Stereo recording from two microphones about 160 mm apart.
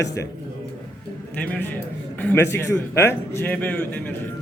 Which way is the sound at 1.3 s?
10° left (ahead or behind).